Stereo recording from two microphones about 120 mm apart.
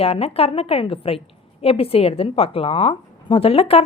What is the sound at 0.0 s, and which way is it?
A woman's voice, 55° left (ahead or behind).